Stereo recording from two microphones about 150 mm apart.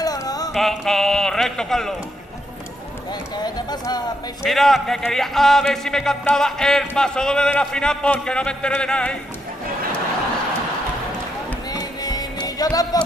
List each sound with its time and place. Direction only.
0.0 s a sound: 25° left (ahead or behind)
0.5 s a man's voice: centre (ahead or behind)
3.3 s speech: 25° left (ahead or behind)
4.4 s a man's voice: centre (ahead or behind)
11.7 s music: 25° left (ahead or behind)